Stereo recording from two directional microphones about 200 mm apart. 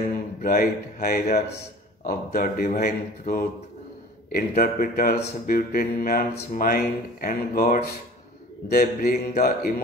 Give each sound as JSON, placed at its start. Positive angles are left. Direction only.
{"t": 0.4, "sound": "speech", "side_deg": 45}